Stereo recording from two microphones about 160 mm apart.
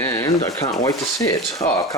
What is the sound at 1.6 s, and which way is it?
Speech, 45° left (ahead or behind).